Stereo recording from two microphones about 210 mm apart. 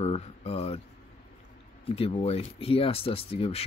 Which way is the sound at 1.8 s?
25° left (ahead or behind).